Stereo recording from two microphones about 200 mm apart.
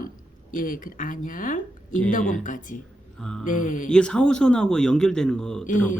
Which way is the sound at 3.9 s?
5° left (ahead or behind).